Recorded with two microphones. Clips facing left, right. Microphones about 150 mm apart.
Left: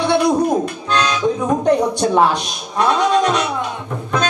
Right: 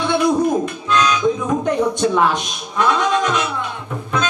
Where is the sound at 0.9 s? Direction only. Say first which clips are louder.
Right 1 dB; 35° left (ahead or behind).